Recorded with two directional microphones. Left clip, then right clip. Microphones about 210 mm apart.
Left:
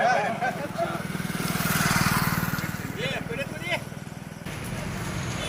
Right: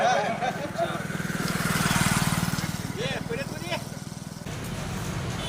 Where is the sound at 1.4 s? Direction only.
40° left (ahead or behind).